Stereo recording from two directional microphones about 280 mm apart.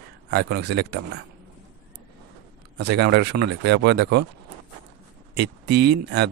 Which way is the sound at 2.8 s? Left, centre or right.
Right.